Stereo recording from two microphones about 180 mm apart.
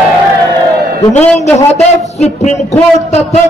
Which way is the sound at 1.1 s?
40° left (ahead or behind).